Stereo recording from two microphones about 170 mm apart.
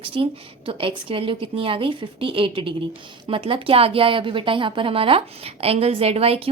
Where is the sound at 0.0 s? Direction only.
30° right (ahead or behind).